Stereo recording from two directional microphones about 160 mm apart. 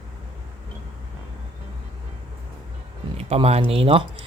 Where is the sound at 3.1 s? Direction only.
40° right (ahead or behind).